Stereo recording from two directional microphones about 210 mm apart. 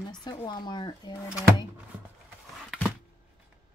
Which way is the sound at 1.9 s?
5° right (ahead or behind).